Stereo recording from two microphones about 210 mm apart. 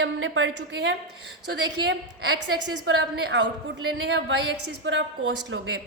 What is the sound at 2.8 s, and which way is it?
Speech, 60° right (ahead or behind).